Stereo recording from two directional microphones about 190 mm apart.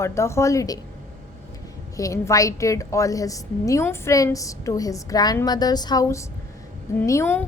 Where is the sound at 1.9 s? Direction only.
15° left (ahead or behind).